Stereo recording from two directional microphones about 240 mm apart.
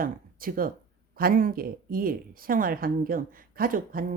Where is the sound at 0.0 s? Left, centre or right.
Right.